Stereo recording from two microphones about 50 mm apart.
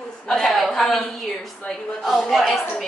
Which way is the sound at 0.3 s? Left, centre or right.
Centre.